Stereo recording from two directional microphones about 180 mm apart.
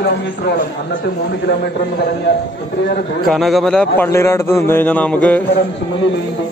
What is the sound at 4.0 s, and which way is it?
A man's voice, 15° left (ahead or behind).